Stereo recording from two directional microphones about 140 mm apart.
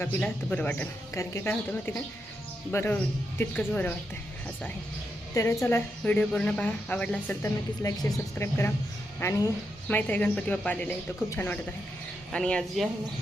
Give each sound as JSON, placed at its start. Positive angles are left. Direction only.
{"t": 0.0, "sound": "speech", "side_deg": 10}
{"t": 5.3, "sound": "speech", "side_deg": 20}
{"t": 7.8, "sound": "speech", "side_deg": 25}